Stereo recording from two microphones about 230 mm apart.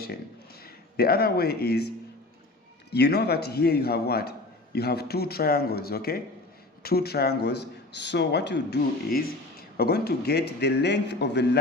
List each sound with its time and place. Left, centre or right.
0.6 s speech: left
2.9 s speech: left